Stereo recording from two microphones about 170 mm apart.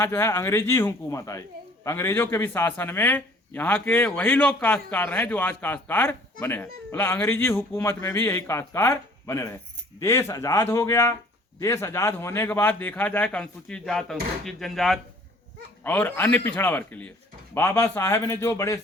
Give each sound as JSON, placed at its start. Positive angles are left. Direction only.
{"t": 0.0, "sound": "speech", "side_deg": 15}